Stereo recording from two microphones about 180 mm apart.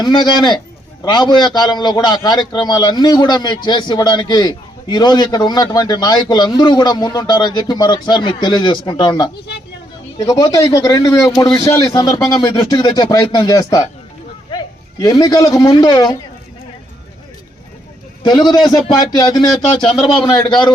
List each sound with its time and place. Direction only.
0.0 s a man's voice: 25° left (ahead or behind)
18.2 s a man's voice: 25° left (ahead or behind)